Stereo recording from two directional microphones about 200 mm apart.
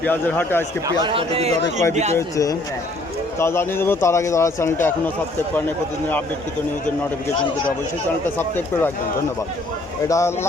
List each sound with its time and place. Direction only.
0.0 s a man's voice: 10° left (ahead or behind)
0.9 s a man's voice: 25° right (ahead or behind)
2.1 s a man's voice: 15° left (ahead or behind)
8.4 s a man's voice: 10° left (ahead or behind)
10.1 s a man's voice: 15° left (ahead or behind)